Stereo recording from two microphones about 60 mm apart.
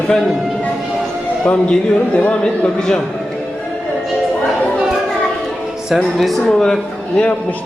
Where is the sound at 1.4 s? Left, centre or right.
Centre.